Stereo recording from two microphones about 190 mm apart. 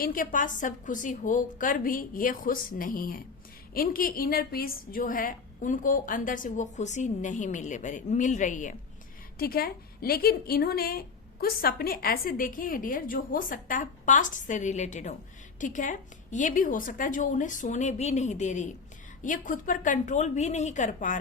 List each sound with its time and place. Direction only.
0.0 s a woman's voice: 45° left (ahead or behind)
9.4 s a woman's voice: 50° left (ahead or behind)